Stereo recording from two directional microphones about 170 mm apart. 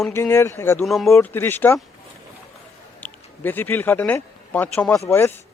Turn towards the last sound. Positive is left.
turn(degrees=15)  # may be behind; listen again after turning